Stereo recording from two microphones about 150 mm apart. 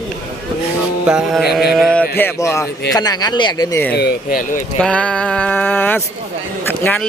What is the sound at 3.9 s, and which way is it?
Speech, 90° left.